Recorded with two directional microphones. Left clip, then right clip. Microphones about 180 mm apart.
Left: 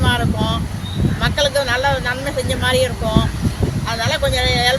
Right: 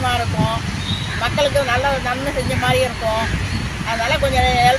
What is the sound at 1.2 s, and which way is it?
Speech, 20° left (ahead or behind).